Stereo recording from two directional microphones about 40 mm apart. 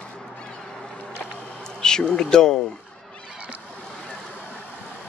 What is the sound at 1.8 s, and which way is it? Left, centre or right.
Speech, left.